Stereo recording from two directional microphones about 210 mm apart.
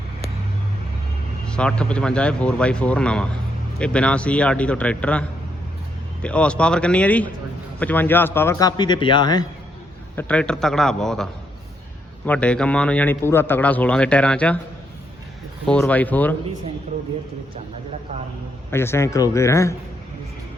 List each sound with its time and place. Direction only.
1.5 s speech: 5° left (ahead or behind)
6.2 s a man's voice: 5° left (ahead or behind)
10.2 s a man's voice: 5° left (ahead or behind)
15.6 s a man's voice: 5° left (ahead or behind)
18.7 s a man's voice: 10° left (ahead or behind)